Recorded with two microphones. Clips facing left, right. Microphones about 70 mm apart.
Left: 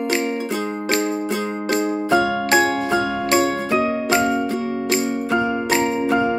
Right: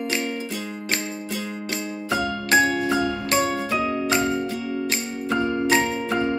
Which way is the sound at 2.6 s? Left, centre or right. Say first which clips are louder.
Left 2 dB; left.